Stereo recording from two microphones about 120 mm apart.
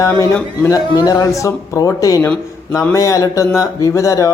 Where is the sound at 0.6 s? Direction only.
30° left (ahead or behind).